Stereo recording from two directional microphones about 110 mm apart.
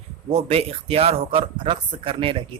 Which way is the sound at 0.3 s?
65° right (ahead or behind).